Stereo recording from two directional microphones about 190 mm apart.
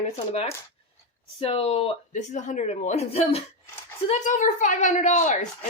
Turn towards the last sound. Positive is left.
turn(degrees=40)  # may be behind; listen again after turning